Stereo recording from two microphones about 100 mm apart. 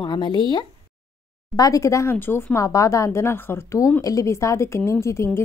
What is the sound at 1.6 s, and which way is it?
A woman's voice, 30° left (ahead or behind).